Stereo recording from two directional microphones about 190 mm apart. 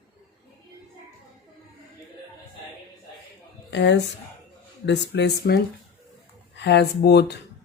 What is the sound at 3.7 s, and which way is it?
Speech, 65° left (ahead or behind).